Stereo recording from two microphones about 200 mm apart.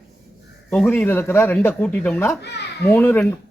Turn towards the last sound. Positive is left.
turn(degrees=10)  # may be behind; listen again after turning